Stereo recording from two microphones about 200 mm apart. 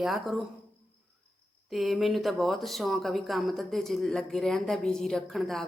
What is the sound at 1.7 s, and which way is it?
Speech, centre (ahead or behind).